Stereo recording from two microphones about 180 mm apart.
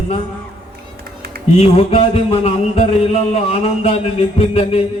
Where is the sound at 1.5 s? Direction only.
35° left (ahead or behind).